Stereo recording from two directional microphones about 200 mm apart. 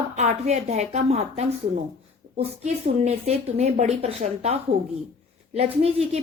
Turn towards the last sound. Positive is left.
turn(degrees=-30)  # may be behind; listen again after turning